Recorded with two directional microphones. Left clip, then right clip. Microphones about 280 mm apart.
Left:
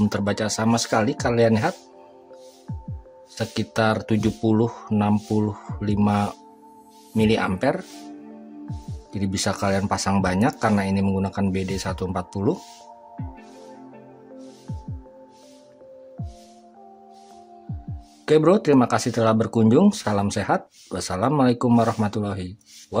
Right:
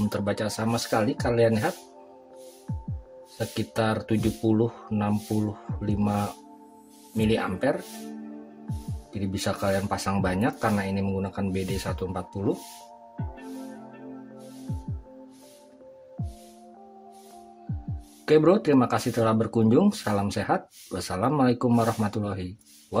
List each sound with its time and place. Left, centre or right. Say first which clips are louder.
0.1 s speech: left 4 dB; centre
3.3 s speech: left 4 dB; centre
9.1 s speech: left 4 dB; centre
17.7 s music: right 2 dB; centre
18.2 s speech: left 3 dB; centre